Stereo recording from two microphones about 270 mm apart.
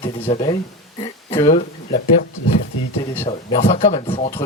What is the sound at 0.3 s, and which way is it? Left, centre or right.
Speech, centre.